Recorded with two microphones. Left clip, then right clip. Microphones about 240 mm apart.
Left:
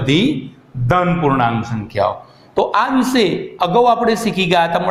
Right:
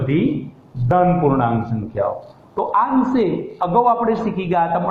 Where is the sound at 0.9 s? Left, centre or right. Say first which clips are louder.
Even; left.